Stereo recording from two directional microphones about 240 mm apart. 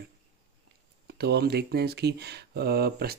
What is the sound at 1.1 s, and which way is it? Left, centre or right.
Speech, right.